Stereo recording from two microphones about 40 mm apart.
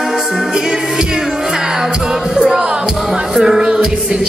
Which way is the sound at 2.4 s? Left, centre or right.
Right.